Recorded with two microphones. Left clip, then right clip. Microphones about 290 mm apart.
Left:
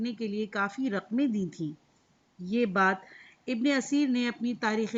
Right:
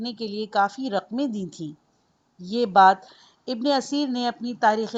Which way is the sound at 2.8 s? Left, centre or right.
Right.